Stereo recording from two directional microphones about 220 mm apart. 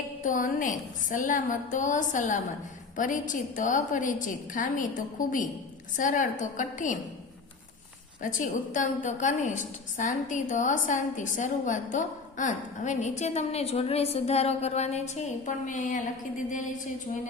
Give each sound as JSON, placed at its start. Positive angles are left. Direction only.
{"t": 0.2, "sound": "a woman's voice", "side_deg": 35}
{"t": 8.2, "sound": "a woman's voice", "side_deg": 35}